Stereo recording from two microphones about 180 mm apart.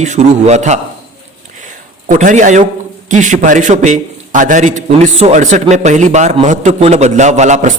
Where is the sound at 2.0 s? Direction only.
45° right (ahead or behind).